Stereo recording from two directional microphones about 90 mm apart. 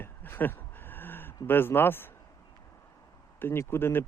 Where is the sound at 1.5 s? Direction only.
25° left (ahead or behind).